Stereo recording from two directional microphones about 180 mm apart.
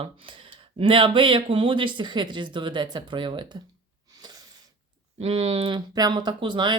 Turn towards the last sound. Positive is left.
turn(degrees=-25)  # may be behind; listen again after turning